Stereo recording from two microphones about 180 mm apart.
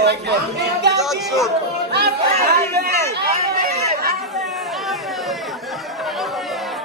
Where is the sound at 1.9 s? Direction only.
60° right (ahead or behind).